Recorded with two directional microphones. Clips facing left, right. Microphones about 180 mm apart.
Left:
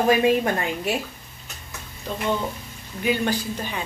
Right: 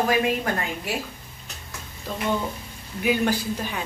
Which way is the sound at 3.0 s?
5° right (ahead or behind).